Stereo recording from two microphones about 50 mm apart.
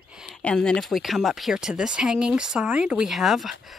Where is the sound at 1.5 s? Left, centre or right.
Centre.